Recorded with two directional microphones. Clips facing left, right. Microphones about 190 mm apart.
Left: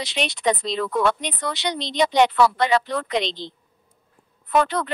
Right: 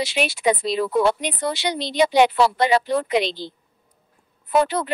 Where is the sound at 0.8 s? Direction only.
30° right (ahead or behind).